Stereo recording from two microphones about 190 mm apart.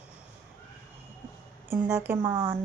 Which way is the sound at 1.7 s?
15° right (ahead or behind).